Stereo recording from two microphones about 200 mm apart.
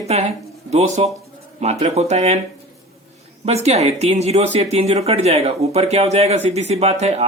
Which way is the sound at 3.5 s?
30° right (ahead or behind).